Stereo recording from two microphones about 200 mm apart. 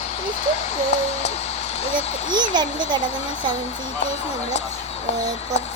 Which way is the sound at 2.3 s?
20° right (ahead or behind).